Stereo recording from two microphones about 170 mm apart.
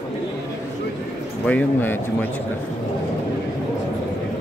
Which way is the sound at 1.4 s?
10° left (ahead or behind).